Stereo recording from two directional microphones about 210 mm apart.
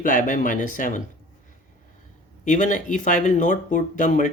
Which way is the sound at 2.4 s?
35° left (ahead or behind).